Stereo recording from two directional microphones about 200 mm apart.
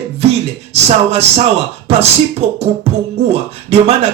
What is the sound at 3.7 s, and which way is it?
Speech, 30° right (ahead or behind).